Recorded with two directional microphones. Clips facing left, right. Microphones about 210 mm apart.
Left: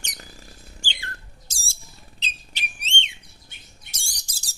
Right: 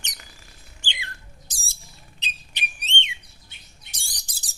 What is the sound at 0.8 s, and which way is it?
Squeak, 20° right (ahead or behind).